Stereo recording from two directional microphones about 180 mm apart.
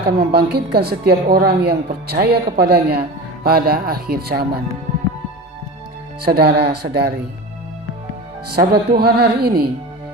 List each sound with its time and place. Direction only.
0.0 s a woman's voice: 60° right (ahead or behind)
6.2 s a woman's voice: 60° right (ahead or behind)
8.4 s a woman's voice: 60° right (ahead or behind)